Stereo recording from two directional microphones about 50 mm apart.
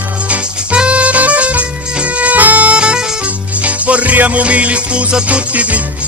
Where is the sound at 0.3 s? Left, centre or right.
Right.